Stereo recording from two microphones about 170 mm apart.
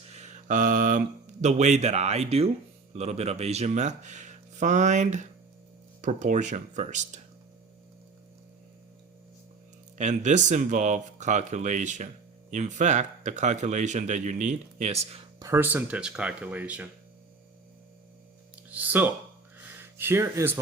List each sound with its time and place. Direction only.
0.1 s speech: 45° right (ahead or behind)
10.0 s speech: 45° right (ahead or behind)
15.4 s speech: 15° right (ahead or behind)
18.5 s music: 10° right (ahead or behind)
20.0 s speech: 15° right (ahead or behind)